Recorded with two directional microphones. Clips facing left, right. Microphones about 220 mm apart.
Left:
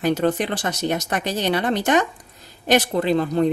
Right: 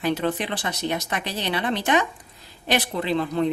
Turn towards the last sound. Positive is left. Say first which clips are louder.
# left 4 dB
turn(degrees=45)  # may be behind; listen again after turning